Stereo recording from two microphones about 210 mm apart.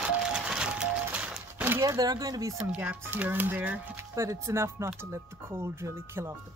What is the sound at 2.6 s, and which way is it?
Speech, 5° right (ahead or behind).